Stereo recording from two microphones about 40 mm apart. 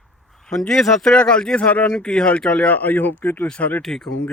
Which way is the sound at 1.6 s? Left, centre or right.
Left.